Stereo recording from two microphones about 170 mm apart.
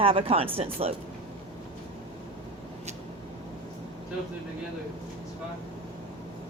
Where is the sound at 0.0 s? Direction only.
35° right (ahead or behind).